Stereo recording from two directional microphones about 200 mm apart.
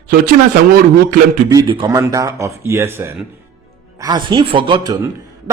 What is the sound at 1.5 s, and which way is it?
A man's voice, 20° right (ahead or behind).